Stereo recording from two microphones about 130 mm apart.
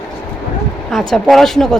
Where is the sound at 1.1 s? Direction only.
Centre (ahead or behind).